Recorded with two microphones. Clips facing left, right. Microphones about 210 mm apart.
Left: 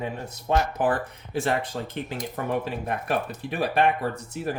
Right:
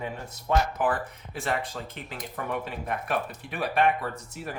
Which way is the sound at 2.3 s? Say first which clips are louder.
Left 4 dB; 35° left (ahead or behind).